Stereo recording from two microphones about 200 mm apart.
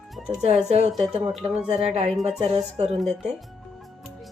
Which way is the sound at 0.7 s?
35° right (ahead or behind).